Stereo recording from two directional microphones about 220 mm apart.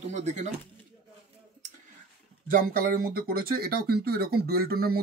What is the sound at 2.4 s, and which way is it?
Speech, 40° right (ahead or behind).